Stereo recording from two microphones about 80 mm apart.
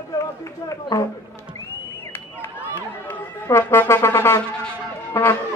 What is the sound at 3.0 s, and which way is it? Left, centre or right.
Speech, left.